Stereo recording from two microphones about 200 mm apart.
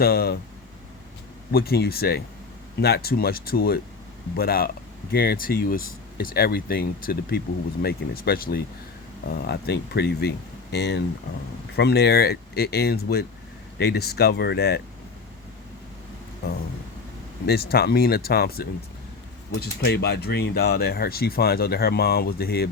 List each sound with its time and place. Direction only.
0.0 s speech: 50° left (ahead or behind)
1.5 s speech: 50° left (ahead or behind)
17.4 s speech: 55° left (ahead or behind)